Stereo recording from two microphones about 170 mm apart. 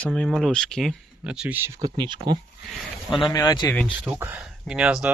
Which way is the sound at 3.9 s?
10° right (ahead or behind).